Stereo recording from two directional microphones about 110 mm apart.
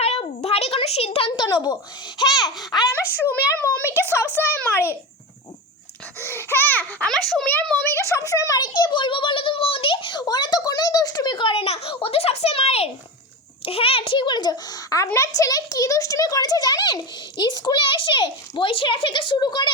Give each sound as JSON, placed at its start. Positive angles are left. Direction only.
{"t": 0.0, "sound": "a sound", "side_deg": 70}
{"t": 1.5, "sound": "a child's voice", "side_deg": 35}
{"t": 2.9, "sound": "a woman's voice", "side_deg": 20}
{"t": 6.1, "sound": "a woman's voice", "side_deg": 20}
{"t": 7.1, "sound": "a child's voice", "side_deg": 5}
{"t": 7.9, "sound": "a child's voice", "side_deg": 25}